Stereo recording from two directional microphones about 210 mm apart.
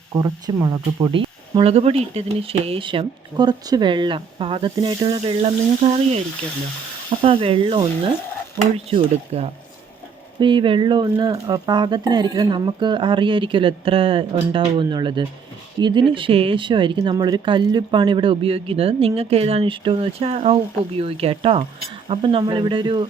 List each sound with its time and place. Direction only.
0.1 s speech: 15° right (ahead or behind)